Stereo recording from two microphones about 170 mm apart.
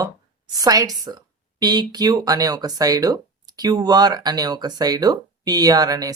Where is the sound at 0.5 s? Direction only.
20° right (ahead or behind).